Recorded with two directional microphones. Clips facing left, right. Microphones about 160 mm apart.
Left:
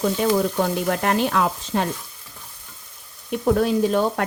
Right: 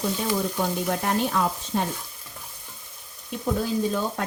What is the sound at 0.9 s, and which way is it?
A woman's voice, 85° left.